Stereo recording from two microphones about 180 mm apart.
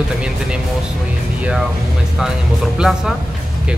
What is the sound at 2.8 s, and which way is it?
Speech, centre (ahead or behind).